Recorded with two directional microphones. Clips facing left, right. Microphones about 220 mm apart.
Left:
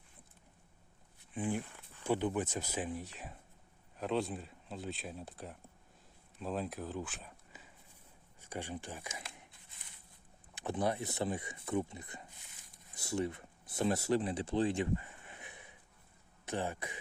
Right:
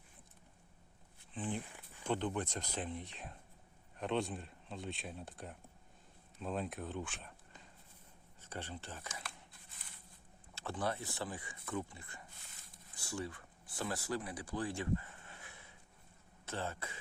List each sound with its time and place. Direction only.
1.3 s speech: 10° left (ahead or behind)
1.6 s a sound: 15° right (ahead or behind)
2.0 s speech: 10° left (ahead or behind)
10.5 s speech: 20° left (ahead or behind)